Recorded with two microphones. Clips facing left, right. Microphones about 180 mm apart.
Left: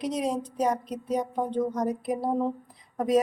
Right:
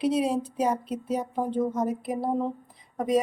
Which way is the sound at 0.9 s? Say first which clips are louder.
Even; 30° right (ahead or behind).